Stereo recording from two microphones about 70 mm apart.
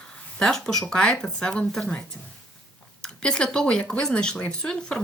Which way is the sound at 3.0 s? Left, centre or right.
Centre.